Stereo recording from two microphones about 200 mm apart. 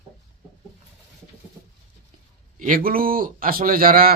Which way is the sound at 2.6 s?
45° right (ahead or behind).